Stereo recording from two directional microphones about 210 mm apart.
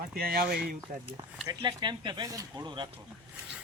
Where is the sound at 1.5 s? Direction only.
20° right (ahead or behind).